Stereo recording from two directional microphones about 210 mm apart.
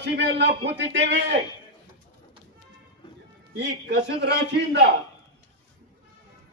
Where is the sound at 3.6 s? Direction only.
55° right (ahead or behind).